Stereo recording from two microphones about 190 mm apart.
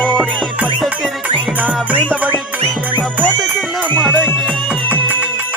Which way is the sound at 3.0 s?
5° right (ahead or behind).